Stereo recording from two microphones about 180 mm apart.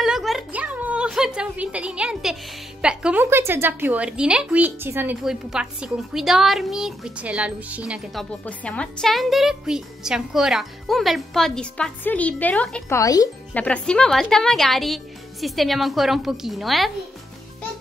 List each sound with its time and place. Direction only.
0.0 s a sound: centre (ahead or behind)
2.8 s a woman's voice: 5° right (ahead or behind)
12.9 s speech: 20° left (ahead or behind)
13.5 s a woman's voice: 5° left (ahead or behind)